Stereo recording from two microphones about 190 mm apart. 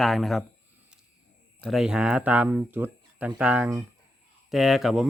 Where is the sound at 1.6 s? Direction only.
Centre (ahead or behind).